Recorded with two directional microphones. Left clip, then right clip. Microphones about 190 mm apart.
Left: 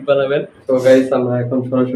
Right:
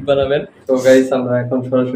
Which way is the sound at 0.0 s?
5° right (ahead or behind).